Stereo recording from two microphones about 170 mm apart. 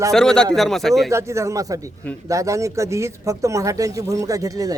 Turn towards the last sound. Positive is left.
turn(degrees=-20)  # may be behind; listen again after turning